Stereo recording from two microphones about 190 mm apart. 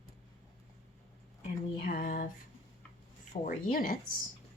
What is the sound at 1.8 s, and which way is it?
Speech, 50° left (ahead or behind).